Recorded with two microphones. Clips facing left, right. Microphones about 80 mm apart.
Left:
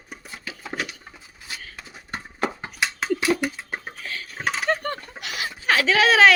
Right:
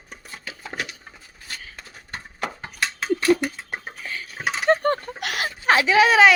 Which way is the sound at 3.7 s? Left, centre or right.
Centre.